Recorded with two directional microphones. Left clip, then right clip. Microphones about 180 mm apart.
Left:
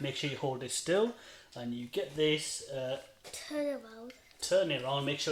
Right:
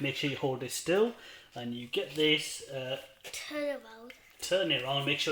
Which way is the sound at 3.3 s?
55° left (ahead or behind).